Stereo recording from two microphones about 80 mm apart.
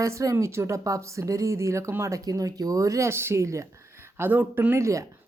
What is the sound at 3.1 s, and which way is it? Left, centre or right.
Speech, right.